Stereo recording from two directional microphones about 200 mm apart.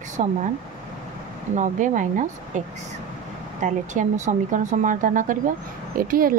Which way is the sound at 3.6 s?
40° right (ahead or behind).